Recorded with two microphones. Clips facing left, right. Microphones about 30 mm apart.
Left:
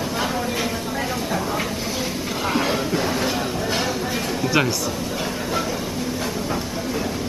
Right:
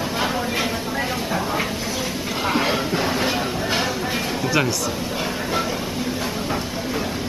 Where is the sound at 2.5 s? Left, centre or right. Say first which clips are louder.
Right 1 dB; centre.